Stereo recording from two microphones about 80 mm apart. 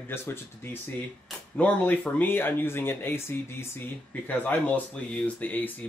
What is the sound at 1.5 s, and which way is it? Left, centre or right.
Speech, centre.